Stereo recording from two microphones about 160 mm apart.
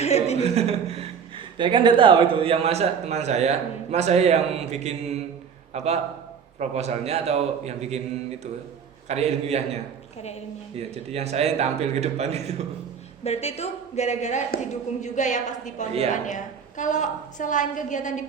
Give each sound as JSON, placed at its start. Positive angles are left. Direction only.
{"t": 0.0, "sound": "chuckle", "side_deg": 40}
{"t": 0.4, "sound": "a man's voice", "side_deg": -40}
{"t": 9.0, "sound": "a man's voice", "side_deg": -40}
{"t": 13.2, "sound": "a woman's voice", "side_deg": 40}